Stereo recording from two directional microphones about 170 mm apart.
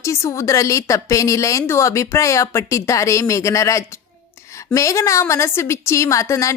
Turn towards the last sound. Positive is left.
turn(degrees=20)  # may be behind; listen again after turning